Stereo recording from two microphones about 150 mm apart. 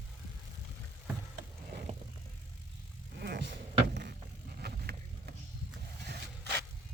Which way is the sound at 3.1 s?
90° right.